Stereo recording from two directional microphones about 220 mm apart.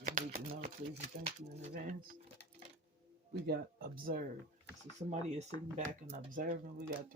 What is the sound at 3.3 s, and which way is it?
Speech, 45° right (ahead or behind).